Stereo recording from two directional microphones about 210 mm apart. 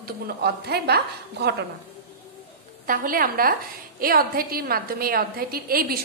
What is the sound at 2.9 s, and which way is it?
A woman's voice, 40° right (ahead or behind).